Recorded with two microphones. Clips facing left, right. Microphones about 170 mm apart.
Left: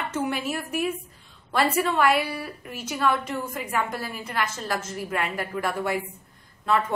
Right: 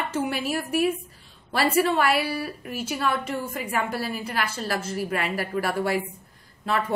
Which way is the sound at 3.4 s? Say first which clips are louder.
Even; 30° right (ahead or behind).